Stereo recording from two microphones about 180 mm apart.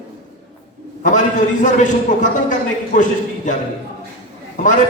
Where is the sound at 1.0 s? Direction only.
45° left (ahead or behind).